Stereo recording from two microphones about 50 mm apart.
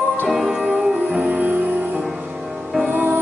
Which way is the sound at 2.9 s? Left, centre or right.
Right.